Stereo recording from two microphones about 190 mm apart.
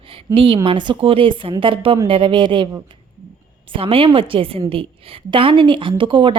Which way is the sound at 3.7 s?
30° right (ahead or behind).